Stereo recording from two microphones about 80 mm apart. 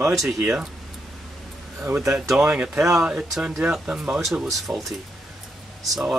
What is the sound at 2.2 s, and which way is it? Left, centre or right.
Speech, centre.